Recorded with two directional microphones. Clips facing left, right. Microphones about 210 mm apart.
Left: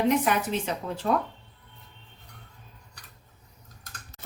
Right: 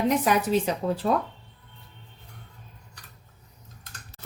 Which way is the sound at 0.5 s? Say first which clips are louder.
Right 6 dB; 35° right (ahead or behind).